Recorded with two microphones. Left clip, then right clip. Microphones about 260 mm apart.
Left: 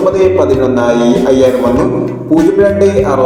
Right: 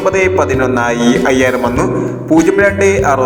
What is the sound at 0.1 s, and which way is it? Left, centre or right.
Music, right.